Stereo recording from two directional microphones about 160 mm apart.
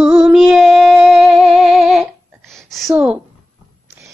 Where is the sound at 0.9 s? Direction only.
5° right (ahead or behind).